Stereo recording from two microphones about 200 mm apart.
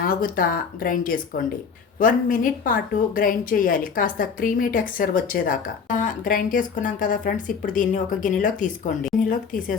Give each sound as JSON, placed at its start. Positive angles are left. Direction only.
{"t": 0.1, "sound": "speech", "side_deg": 45}